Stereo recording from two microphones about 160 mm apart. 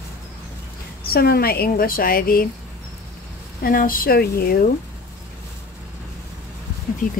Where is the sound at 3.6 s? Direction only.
60° left (ahead or behind).